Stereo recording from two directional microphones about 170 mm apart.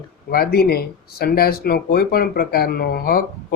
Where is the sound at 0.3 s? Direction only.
65° left (ahead or behind).